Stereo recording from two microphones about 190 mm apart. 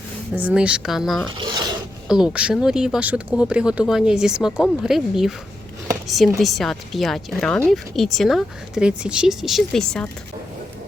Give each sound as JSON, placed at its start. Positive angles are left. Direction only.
{"t": 0.3, "sound": "speech", "side_deg": -5}
{"t": 1.4, "sound": "mechanisms", "side_deg": -25}
{"t": 2.0, "sound": "speech", "side_deg": -5}